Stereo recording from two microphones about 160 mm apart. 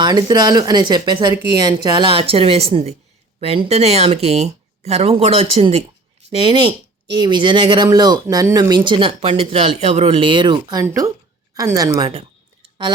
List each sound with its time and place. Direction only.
0.0 s speech: 25° right (ahead or behind)